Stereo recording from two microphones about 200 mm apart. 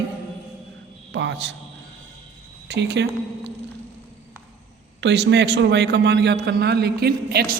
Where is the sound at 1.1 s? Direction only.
60° right (ahead or behind).